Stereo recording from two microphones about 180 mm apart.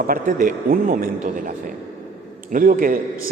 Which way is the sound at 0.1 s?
45° right (ahead or behind).